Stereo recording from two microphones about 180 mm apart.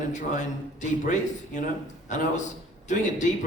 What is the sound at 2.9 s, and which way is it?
Speech, 45° left (ahead or behind).